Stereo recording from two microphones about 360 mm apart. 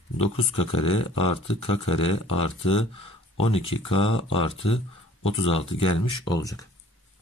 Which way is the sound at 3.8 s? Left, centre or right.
Centre.